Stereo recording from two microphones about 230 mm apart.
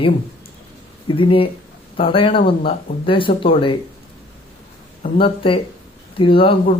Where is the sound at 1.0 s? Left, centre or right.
Left.